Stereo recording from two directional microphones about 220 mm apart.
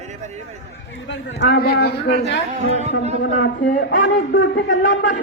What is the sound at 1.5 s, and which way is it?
Speech, 45° left (ahead or behind).